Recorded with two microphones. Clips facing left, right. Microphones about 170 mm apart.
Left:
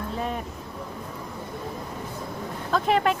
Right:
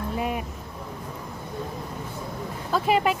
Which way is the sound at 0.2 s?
10° right (ahead or behind).